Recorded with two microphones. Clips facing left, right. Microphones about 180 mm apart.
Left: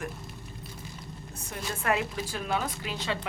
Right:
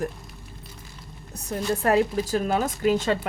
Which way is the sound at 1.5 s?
40° right (ahead or behind).